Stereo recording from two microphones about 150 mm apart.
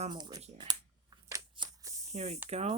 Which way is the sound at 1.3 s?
25° right (ahead or behind).